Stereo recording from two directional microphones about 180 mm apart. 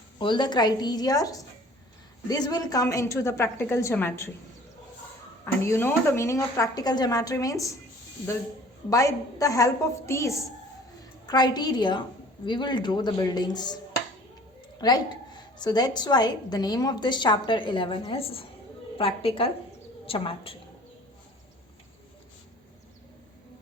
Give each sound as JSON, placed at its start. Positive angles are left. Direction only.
{"t": 0.2, "sound": "a woman's voice", "side_deg": 25}
{"t": 5.6, "sound": "a woman's voice", "side_deg": 15}
{"t": 8.9, "sound": "a woman's voice", "side_deg": 20}
{"t": 14.8, "sound": "a woman's voice", "side_deg": 20}